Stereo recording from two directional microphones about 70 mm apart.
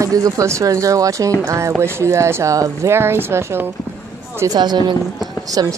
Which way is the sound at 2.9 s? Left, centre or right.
Right.